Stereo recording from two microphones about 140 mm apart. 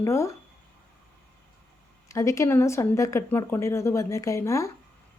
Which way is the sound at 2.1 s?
20° left (ahead or behind).